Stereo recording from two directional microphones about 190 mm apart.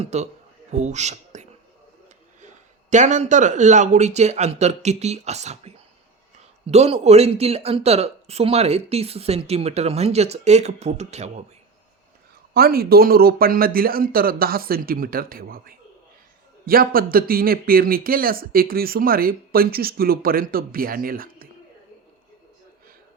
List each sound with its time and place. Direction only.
0.0 s speech: 35° right (ahead or behind)
2.9 s speech: 40° right (ahead or behind)
12.5 s speech: 50° right (ahead or behind)